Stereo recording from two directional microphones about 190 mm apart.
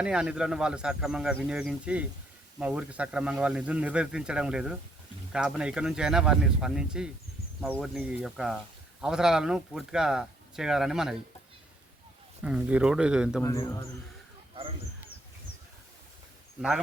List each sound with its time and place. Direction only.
0.0 s speech: 5° right (ahead or behind)
12.4 s speech: 5° right (ahead or behind)
13.4 s a man's voice: 15° left (ahead or behind)
16.6 s speech: 5° right (ahead or behind)